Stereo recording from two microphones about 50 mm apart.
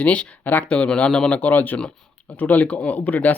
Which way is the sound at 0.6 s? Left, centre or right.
Centre.